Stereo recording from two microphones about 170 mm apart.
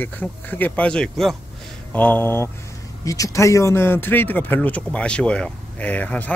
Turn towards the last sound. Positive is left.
turn(degrees=10)  # may be behind; listen again after turning